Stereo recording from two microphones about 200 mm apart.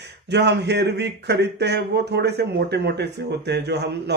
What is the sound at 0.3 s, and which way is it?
Speech, 60° right (ahead or behind).